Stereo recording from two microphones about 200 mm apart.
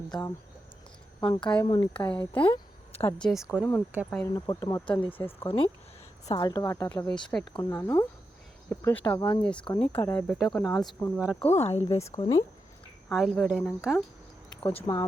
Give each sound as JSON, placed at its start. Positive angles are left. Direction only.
{"t": 0.1, "sound": "a woman's voice", "side_deg": 20}
{"t": 2.0, "sound": "a woman's voice", "side_deg": 10}
{"t": 2.4, "sound": "a sound", "side_deg": 25}
{"t": 3.2, "sound": "a woman's voice", "side_deg": 0}
{"t": 4.1, "sound": "a woman's voice", "side_deg": 10}
{"t": 7.6, "sound": "a woman's voice", "side_deg": 15}
{"t": 9.0, "sound": "speech", "side_deg": 20}
{"t": 9.4, "sound": "a woman's voice", "side_deg": 5}
{"t": 10.6, "sound": "a woman's voice", "side_deg": 15}
{"t": 11.5, "sound": "speech", "side_deg": 30}
{"t": 11.9, "sound": "a woman's voice", "side_deg": 15}
{"t": 13.1, "sound": "a woman's voice", "side_deg": 0}
{"t": 14.6, "sound": "speech", "side_deg": 25}